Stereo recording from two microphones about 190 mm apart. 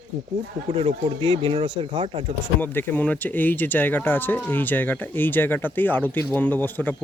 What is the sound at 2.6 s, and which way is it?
Speech, 10° left (ahead or behind).